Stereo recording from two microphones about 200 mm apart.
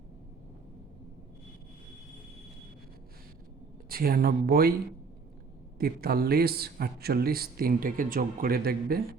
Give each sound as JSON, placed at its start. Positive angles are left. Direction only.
{"t": 3.8, "sound": "speech", "side_deg": -45}
{"t": 5.8, "sound": "speech", "side_deg": -50}